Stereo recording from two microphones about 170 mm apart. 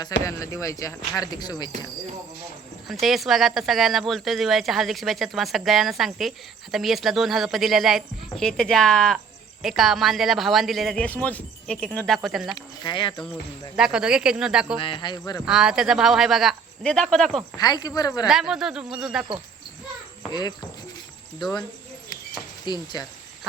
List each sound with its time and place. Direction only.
0.3 s speech: 20° left (ahead or behind)
2.8 s speech: centre (ahead or behind)
12.5 s speech: 25° left (ahead or behind)
13.7 s speech: 5° right (ahead or behind)
14.8 s speech: 30° left (ahead or behind)
15.2 s speech: 15° left (ahead or behind)
15.4 s speech: 5° right (ahead or behind)
17.6 s speech: 25° left (ahead or behind)
18.3 s speech: centre (ahead or behind)
20.3 s speech: 25° left (ahead or behind)
22.6 s speech: 25° left (ahead or behind)